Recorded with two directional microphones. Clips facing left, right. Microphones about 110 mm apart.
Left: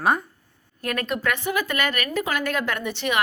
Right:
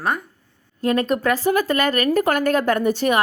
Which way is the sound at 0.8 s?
25° right (ahead or behind).